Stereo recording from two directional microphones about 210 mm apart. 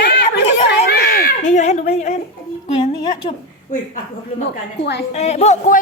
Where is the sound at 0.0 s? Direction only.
45° left (ahead or behind).